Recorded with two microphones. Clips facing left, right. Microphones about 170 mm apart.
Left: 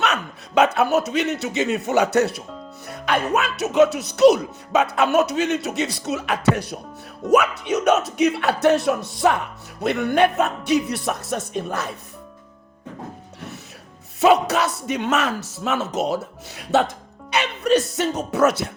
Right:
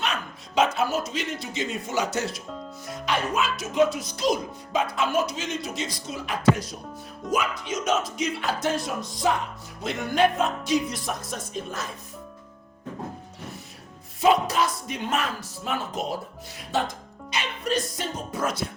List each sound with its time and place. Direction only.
0.0 s speech: 65° left (ahead or behind)
14.2 s speech: 75° left (ahead or behind)